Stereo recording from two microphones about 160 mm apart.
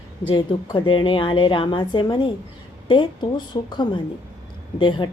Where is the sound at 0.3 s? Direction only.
30° left (ahead or behind).